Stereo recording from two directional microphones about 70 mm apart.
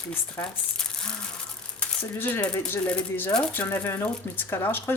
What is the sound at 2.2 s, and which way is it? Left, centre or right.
Speech, left.